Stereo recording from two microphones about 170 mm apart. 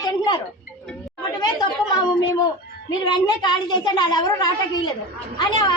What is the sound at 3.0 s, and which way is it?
Speech, 25° left (ahead or behind).